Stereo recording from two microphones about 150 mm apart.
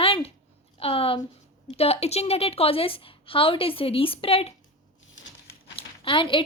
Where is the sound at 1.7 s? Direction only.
40° left (ahead or behind).